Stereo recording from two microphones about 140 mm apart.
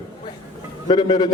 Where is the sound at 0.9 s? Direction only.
30° left (ahead or behind).